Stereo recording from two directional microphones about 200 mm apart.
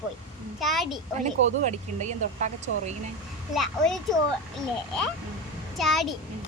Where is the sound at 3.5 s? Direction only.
Centre (ahead or behind).